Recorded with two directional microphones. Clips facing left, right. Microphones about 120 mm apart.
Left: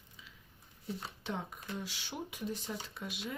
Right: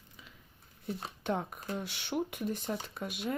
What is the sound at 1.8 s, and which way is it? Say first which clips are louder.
Speech: right 8 dB; 60° right (ahead or behind).